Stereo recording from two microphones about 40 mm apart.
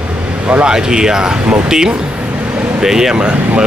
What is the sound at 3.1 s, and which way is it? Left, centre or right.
Speech, right.